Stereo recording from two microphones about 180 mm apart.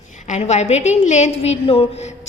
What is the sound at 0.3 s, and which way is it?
A woman's voice, 40° left (ahead or behind).